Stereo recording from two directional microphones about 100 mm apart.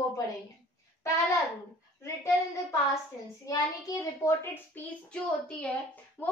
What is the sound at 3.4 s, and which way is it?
Speech, 35° left (ahead or behind).